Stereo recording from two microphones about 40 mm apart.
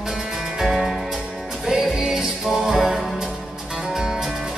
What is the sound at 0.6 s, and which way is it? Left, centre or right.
Music, centre.